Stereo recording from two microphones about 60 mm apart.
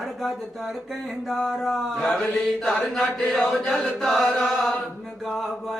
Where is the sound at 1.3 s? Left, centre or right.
Centre.